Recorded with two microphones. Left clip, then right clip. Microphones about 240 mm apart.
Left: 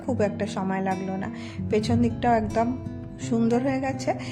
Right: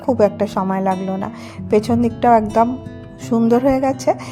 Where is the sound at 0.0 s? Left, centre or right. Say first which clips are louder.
Right 11 dB; right.